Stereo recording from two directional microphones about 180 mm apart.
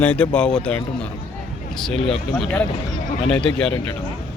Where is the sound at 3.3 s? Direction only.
5° left (ahead or behind).